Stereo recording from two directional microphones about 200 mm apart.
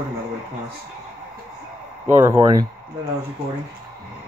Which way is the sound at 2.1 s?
10° right (ahead or behind).